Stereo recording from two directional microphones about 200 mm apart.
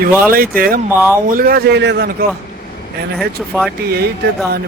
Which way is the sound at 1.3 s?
45° right (ahead or behind).